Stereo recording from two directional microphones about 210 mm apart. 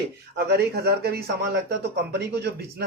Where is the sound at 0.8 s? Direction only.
50° right (ahead or behind).